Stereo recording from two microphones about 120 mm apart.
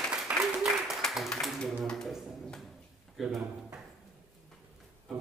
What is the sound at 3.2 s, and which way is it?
Speech, 5° right (ahead or behind).